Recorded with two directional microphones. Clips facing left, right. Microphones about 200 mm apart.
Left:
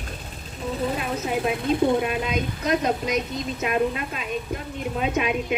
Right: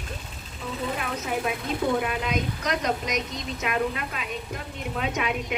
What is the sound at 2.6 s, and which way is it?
A woman's voice, 25° left (ahead or behind).